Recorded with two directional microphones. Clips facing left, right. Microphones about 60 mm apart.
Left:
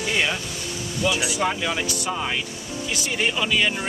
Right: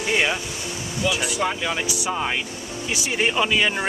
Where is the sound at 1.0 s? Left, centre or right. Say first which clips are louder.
Even; centre.